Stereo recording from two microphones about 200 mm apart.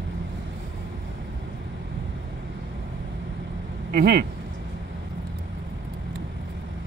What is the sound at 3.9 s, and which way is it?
Speech, 50° right (ahead or behind).